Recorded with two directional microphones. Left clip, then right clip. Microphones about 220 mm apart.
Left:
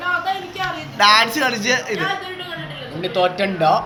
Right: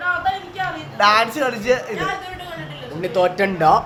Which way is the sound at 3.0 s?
35° right (ahead or behind).